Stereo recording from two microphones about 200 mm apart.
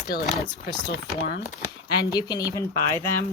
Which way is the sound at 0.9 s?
55° left (ahead or behind).